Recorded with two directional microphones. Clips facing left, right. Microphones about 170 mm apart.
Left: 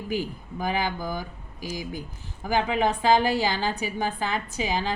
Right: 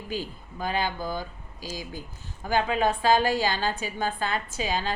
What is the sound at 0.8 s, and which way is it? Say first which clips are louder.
Speech: even; 15° left (ahead or behind).